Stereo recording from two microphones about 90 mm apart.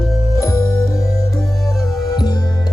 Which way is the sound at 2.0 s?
50° left (ahead or behind).